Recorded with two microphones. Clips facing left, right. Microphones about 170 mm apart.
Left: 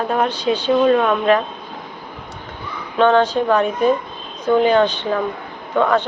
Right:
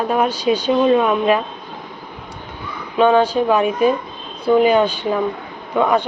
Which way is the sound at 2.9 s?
10° right (ahead or behind).